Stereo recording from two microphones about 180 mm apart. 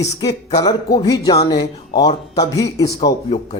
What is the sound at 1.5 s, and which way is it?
A man's voice, 25° left (ahead or behind).